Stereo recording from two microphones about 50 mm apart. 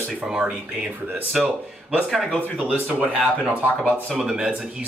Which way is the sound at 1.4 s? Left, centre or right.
Centre.